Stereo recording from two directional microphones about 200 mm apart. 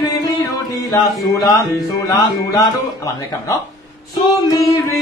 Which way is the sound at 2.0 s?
20° left (ahead or behind).